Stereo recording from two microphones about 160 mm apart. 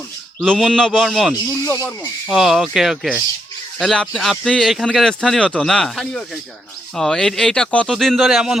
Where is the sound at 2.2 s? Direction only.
Centre (ahead or behind).